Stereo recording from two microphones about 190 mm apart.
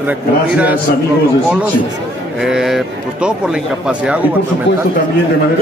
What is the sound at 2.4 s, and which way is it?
A man's voice, 5° right (ahead or behind).